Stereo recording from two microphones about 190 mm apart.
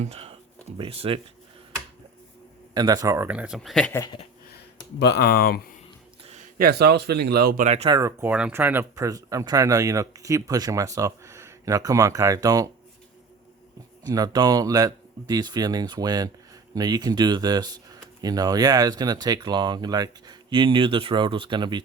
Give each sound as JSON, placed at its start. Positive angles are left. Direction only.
{"t": 0.0, "sound": "speech", "side_deg": -30}
{"t": 2.7, "sound": "speech", "side_deg": -20}
{"t": 3.9, "sound": "speech", "side_deg": 15}
{"t": 4.9, "sound": "speech", "side_deg": 60}
{"t": 6.6, "sound": "speech", "side_deg": -55}
{"t": 7.6, "sound": "speech", "side_deg": -35}
{"t": 7.9, "sound": "speech", "side_deg": -15}
{"t": 14.1, "sound": "speech", "side_deg": -20}